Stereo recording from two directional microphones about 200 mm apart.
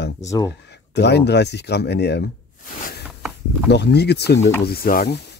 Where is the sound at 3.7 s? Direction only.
55° left (ahead or behind).